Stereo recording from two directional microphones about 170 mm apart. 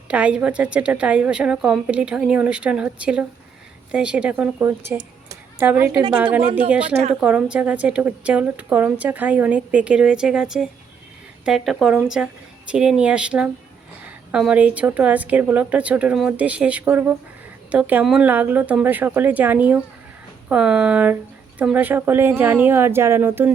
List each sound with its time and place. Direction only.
0.1 s a woman's voice: 5° right (ahead or behind)
4.9 s a sound: 15° right (ahead or behind)
6.4 s speech: 35° right (ahead or behind)
7.2 s a woman's voice: 5° right (ahead or behind)